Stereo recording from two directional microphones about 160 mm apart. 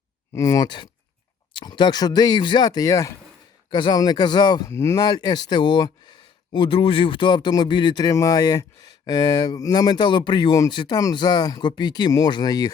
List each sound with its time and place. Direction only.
0.3 s speech: 20° left (ahead or behind)